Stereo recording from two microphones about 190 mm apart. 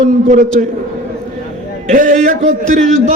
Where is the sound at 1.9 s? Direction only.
45° right (ahead or behind).